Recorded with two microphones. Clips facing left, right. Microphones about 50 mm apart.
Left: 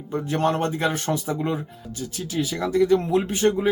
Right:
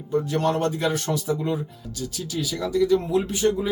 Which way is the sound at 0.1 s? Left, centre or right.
Left.